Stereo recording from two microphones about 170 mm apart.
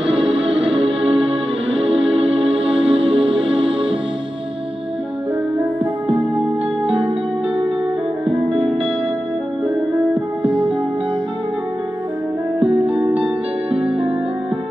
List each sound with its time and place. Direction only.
0.1 s music: 35° right (ahead or behind)
13.1 s music: 35° right (ahead or behind)